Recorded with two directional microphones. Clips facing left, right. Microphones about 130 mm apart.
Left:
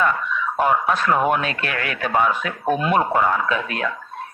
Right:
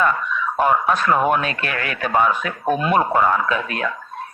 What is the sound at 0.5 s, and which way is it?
A man's voice, 45° right (ahead or behind).